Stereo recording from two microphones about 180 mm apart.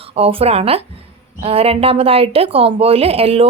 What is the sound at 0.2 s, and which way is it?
Speech, 30° right (ahead or behind).